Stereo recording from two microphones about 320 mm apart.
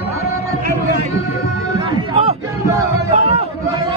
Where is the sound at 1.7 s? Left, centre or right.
Centre.